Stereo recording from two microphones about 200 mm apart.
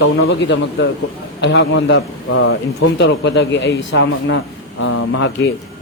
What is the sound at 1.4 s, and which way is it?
A man's voice, 65° left (ahead or behind).